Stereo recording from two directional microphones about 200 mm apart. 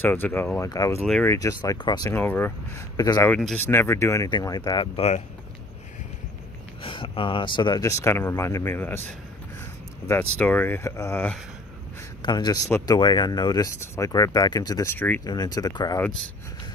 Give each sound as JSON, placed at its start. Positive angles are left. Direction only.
{"t": 0.0, "sound": "speech", "side_deg": 10}
{"t": 1.0, "sound": "speech", "side_deg": 0}
{"t": 1.3, "sound": "speech", "side_deg": 15}
{"t": 3.3, "sound": "speech", "side_deg": 5}
{"t": 6.8, "sound": "speech", "side_deg": 25}
{"t": 10.4, "sound": "speech", "side_deg": 10}
{"t": 15.2, "sound": "speech", "side_deg": 20}